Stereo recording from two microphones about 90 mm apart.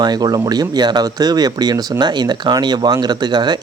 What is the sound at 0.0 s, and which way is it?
Speech, 50° right (ahead or behind).